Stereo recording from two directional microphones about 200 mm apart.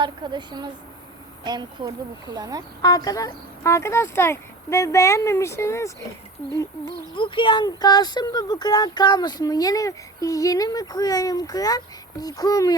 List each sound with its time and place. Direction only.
0.0 s a woman's voice: 20° right (ahead or behind)
2.8 s speech: 20° left (ahead or behind)